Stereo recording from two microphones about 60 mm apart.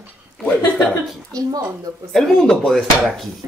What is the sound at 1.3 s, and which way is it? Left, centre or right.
Speech, right.